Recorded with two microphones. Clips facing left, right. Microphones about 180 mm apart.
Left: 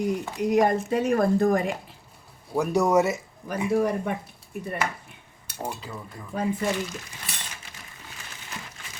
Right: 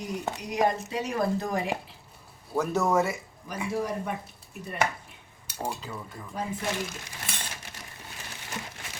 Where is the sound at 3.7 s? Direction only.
60° left (ahead or behind).